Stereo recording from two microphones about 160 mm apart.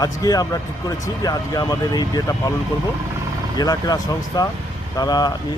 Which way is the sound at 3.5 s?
25° left (ahead or behind).